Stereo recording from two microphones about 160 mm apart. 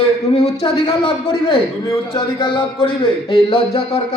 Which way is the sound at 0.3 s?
35° left (ahead or behind).